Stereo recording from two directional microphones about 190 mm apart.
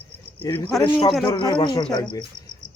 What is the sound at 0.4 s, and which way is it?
Speech, 10° left (ahead or behind).